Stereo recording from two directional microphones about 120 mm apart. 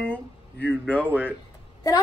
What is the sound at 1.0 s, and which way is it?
Speech, 15° right (ahead or behind).